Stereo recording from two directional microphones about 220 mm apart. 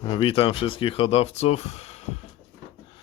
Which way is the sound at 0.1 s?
25° left (ahead or behind).